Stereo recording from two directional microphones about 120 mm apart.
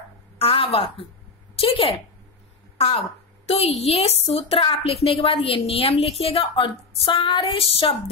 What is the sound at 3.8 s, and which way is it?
A woman's voice, 55° left (ahead or behind).